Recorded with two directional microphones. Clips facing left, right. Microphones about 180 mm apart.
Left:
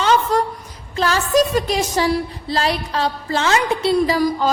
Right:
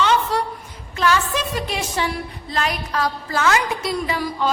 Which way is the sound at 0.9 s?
35° left (ahead or behind).